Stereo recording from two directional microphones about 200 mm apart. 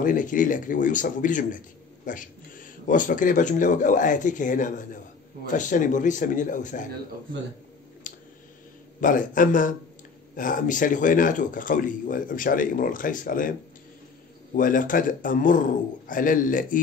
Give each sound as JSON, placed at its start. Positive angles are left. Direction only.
{"t": 0.0, "sound": "speech", "side_deg": 40}
{"t": 8.0, "sound": "a sound", "side_deg": 40}
{"t": 9.0, "sound": "a man's voice", "side_deg": 40}